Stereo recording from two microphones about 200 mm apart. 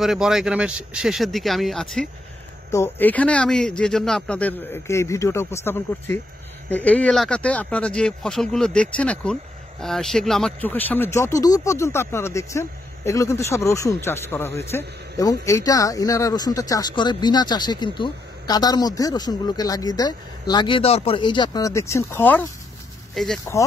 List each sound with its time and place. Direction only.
0.0 s speech: centre (ahead or behind)